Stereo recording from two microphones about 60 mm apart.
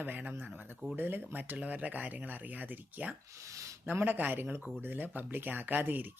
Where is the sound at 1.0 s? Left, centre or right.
Right.